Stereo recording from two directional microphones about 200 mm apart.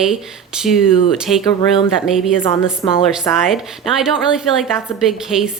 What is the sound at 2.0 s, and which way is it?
Speech, centre (ahead or behind).